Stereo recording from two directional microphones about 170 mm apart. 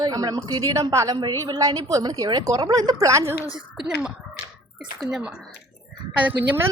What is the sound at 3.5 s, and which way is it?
Speech, 5° right (ahead or behind).